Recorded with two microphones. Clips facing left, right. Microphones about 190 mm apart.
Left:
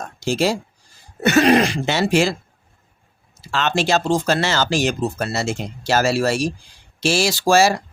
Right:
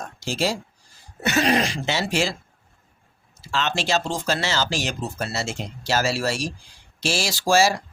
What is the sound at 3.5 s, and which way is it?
Speech, 55° left (ahead or behind).